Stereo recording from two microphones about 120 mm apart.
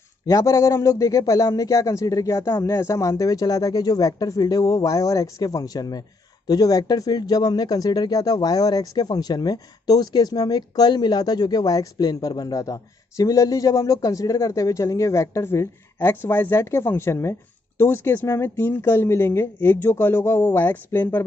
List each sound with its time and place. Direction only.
0.3 s speech: 25° left (ahead or behind)